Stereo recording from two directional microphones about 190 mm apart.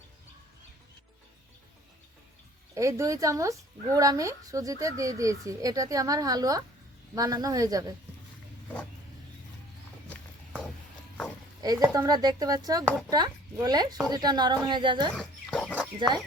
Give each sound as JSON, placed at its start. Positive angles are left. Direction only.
{"t": 2.7, "sound": "a woman's voice", "side_deg": -15}
{"t": 11.6, "sound": "a woman's voice", "side_deg": -20}
{"t": 15.1, "sound": "a sound", "side_deg": 5}